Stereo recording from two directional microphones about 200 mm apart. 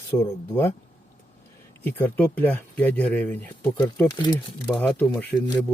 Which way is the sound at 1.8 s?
10° left (ahead or behind).